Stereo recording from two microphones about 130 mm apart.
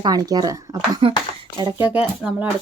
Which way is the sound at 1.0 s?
40° right (ahead or behind).